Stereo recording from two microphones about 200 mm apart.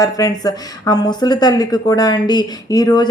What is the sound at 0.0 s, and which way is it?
Speech, 20° left (ahead or behind).